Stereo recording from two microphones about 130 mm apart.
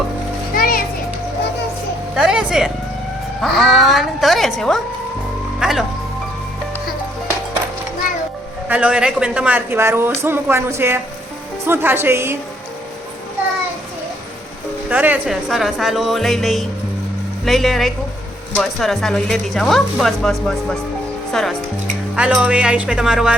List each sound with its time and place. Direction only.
0.5 s children playing: 90° left
2.1 s speech: 5° right (ahead or behind)
8.6 s speech: 10° right (ahead or behind)
14.8 s speech: 10° right (ahead or behind); by 20.7 s 5° left (ahead or behind)
22.1 s speech: 5° right (ahead or behind)